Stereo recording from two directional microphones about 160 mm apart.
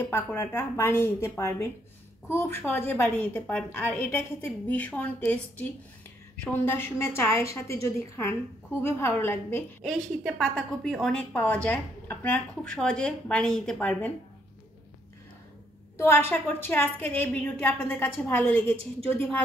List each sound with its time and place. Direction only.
0.0 s a woman's voice: 15° left (ahead or behind)
9.8 s a woman's voice: 5° left (ahead or behind)
16.0 s a woman's voice: 15° left (ahead or behind)